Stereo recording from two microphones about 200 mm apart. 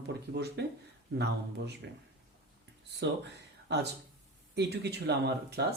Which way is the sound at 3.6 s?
55° right (ahead or behind).